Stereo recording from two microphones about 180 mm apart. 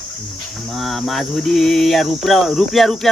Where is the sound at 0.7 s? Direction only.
Centre (ahead or behind).